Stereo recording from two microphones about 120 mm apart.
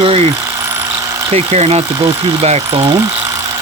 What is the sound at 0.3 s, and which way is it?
Engine, 25° right (ahead or behind).